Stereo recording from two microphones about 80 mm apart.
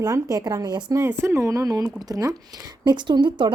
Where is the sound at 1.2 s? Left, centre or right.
Right.